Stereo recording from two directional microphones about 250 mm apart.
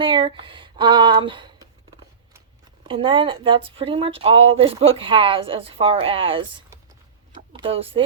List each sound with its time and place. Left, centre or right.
0.0 s speech: centre
2.8 s speech: centre
7.5 s speech: right